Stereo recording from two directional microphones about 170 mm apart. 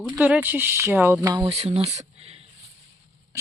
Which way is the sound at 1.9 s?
40° right (ahead or behind).